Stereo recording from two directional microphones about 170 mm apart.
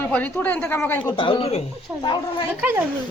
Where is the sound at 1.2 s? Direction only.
30° left (ahead or behind).